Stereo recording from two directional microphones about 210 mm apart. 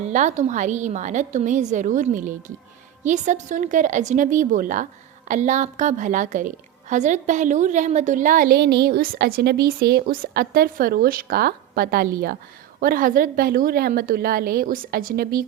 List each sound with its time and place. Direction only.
0.0 s a woman's voice: 35° right (ahead or behind)